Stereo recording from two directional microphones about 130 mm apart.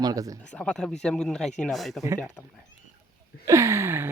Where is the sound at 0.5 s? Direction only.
5° left (ahead or behind).